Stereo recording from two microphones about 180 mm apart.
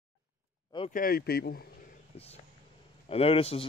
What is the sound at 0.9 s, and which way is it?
Speech, 55° left (ahead or behind).